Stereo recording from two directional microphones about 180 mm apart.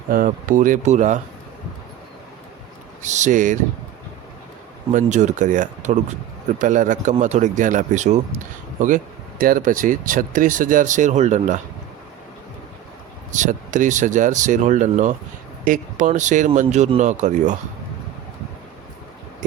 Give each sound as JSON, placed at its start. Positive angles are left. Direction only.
{"t": 0.1, "sound": "speech", "side_deg": -50}
{"t": 3.0, "sound": "speech", "side_deg": -40}
{"t": 4.9, "sound": "speech", "side_deg": -45}
{"t": 9.4, "sound": "speech", "side_deg": -50}
{"t": 13.3, "sound": "a man's voice", "side_deg": -45}